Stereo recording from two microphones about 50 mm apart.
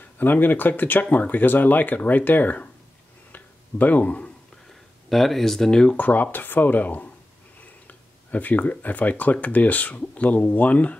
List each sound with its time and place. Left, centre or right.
0.0 s speech: left
3.3 s a sound: left
5.1 s speech: centre
5.9 s speech: left